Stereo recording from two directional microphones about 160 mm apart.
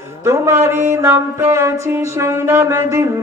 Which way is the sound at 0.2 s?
15° right (ahead or behind).